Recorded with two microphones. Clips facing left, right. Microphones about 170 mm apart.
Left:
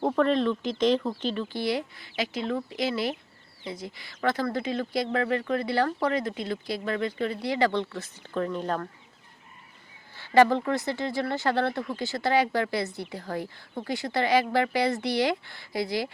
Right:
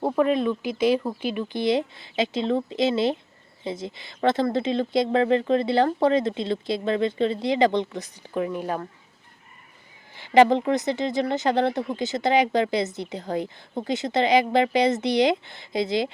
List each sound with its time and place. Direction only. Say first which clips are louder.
0.0 s speech: right 2 dB; 5° right (ahead or behind)
10.2 s speech: right 3 dB; 15° right (ahead or behind)